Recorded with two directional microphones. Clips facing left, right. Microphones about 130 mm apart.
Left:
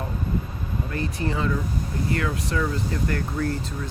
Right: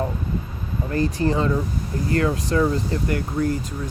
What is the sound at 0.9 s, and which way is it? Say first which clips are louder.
Speech: right 7 dB; 35° right (ahead or behind).